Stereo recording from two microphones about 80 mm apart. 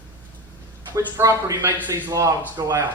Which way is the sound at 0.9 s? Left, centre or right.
Right.